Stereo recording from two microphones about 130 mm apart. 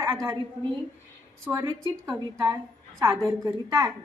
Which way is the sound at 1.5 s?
5° right (ahead or behind).